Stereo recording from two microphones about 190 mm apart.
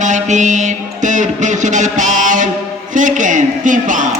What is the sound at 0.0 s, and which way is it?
Music, 40° right (ahead or behind).